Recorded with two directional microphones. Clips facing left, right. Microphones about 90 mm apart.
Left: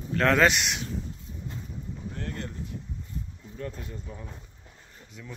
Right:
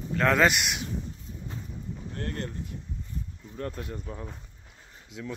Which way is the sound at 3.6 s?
70° right (ahead or behind).